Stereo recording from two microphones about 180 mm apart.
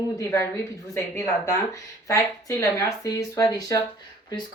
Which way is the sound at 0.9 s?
15° left (ahead or behind).